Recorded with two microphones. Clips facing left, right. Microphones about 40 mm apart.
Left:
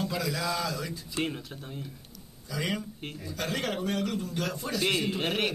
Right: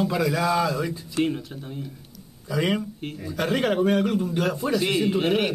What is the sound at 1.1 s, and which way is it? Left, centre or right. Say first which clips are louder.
Speech: right 7 dB; centre.